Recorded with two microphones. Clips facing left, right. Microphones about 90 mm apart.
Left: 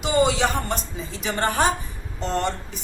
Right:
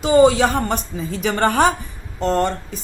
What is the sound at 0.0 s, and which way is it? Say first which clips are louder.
A woman's voice: right 7 dB; 35° right (ahead or behind).